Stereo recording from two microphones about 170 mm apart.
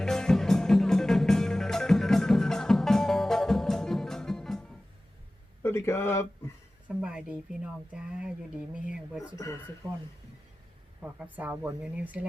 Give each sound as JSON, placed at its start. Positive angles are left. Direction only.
{"t": 0.0, "sound": "music", "side_deg": 5}
{"t": 5.6, "sound": "a sound", "side_deg": 15}
{"t": 6.8, "sound": "speech", "side_deg": -5}
{"t": 9.3, "sound": "speech", "side_deg": 20}
{"t": 11.0, "sound": "speech", "side_deg": -10}